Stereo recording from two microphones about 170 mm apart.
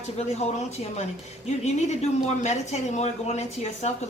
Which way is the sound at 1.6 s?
40° left (ahead or behind).